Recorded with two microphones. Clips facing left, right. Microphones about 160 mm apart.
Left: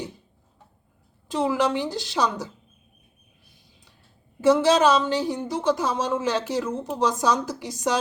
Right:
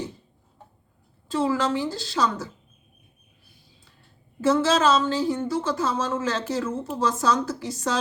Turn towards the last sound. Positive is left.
turn(degrees=15)  # may be behind; listen again after turning